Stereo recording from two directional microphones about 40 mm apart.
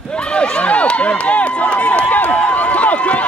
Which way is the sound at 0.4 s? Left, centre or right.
Left.